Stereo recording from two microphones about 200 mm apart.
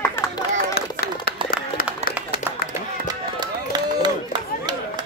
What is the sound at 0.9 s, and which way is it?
Run, 50° left (ahead or behind).